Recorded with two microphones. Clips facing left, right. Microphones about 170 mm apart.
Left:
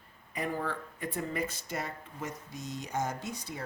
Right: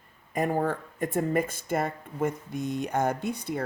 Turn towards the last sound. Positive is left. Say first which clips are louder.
# right 9 dB
turn(degrees=-60)  # may be behind; listen again after turning